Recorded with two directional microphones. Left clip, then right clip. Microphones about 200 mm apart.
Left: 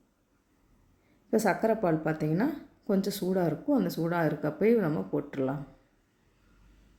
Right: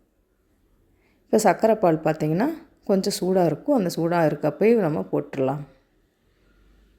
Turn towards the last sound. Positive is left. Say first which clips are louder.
# right 7 dB
turn(degrees=-40)  # may be behind; listen again after turning